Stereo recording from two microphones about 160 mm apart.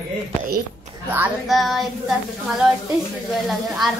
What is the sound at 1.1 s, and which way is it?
Speech, 5° right (ahead or behind).